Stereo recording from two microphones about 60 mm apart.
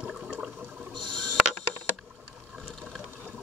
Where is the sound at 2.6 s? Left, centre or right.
Centre.